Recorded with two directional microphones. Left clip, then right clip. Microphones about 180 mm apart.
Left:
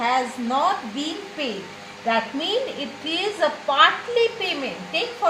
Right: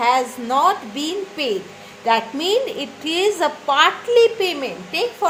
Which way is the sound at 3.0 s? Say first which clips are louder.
Right 4 dB; 55° right (ahead or behind).